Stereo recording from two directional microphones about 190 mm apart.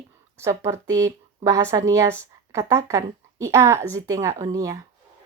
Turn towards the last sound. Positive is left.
turn(degrees=-15)  # may be behind; listen again after turning